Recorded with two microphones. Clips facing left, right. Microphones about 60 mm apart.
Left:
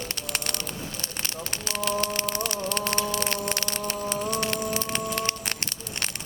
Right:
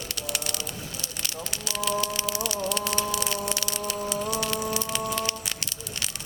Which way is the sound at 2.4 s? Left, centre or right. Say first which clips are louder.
Even; left.